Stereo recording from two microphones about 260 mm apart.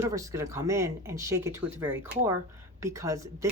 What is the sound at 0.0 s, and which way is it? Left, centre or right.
Speech, centre.